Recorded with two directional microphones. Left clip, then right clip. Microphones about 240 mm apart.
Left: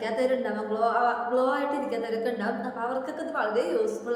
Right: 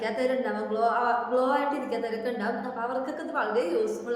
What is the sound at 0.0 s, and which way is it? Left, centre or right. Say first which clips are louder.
A woman's voice: left 1 dB; centre.